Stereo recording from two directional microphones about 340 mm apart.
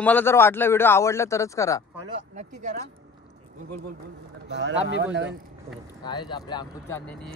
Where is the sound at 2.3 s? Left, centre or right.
Right.